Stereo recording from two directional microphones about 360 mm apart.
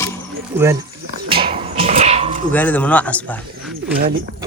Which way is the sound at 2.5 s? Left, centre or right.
Centre.